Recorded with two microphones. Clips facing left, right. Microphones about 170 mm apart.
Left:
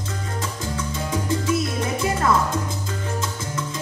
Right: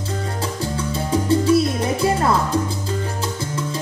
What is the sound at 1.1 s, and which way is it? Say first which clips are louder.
Salsa music: right 7 dB; 30° right (ahead or behind).